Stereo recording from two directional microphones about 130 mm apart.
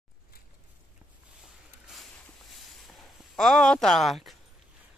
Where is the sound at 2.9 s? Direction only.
Centre (ahead or behind).